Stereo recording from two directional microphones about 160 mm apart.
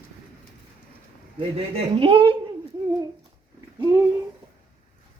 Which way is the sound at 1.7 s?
35° right (ahead or behind).